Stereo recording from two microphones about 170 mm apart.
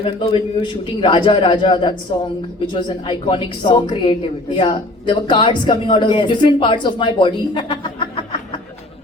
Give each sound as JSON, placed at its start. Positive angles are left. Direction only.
{"t": 0.0, "sound": "a woman's voice", "side_deg": 30}